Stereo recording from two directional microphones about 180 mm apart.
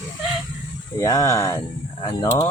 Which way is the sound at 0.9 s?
20° left (ahead or behind).